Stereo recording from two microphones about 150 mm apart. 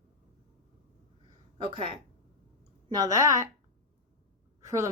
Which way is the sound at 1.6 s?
35° right (ahead or behind).